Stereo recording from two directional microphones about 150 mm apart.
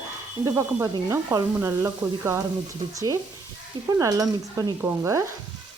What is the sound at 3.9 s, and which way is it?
Stir, 25° right (ahead or behind).